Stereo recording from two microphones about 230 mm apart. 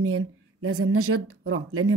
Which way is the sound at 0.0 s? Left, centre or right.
Right.